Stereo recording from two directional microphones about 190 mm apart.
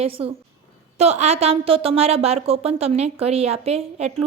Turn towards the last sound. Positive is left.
turn(degrees=-35)  # may be behind; listen again after turning